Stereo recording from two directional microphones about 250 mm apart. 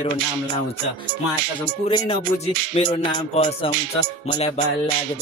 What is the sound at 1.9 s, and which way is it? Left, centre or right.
Music, left.